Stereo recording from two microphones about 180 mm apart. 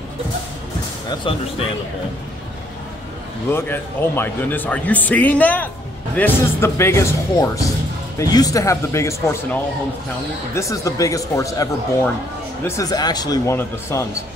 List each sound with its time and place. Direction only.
1.3 s speech: 30° left (ahead or behind)
3.4 s speech: 10° left (ahead or behind)